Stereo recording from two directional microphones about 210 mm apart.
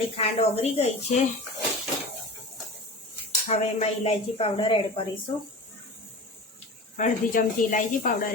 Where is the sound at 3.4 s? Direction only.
30° left (ahead or behind).